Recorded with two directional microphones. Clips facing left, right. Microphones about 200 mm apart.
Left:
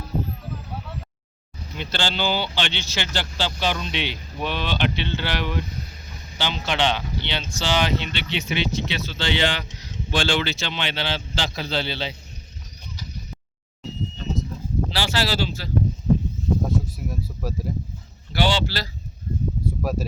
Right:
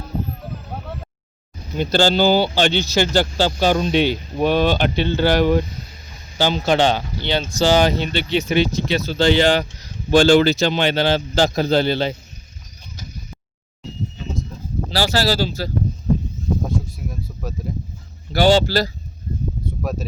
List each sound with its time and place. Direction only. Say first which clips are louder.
0.7 s a sound: right 4 dB; 50° right (ahead or behind)
1.7 s speech: right 11 dB; 40° right (ahead or behind)
14.8 s speech: right 7 dB; 40° right (ahead or behind)
16.8 s speech: even; 5° left (ahead or behind)
18.3 s speech: right 8 dB; 45° right (ahead or behind)
19.8 s speech: right 1 dB; 5° left (ahead or behind)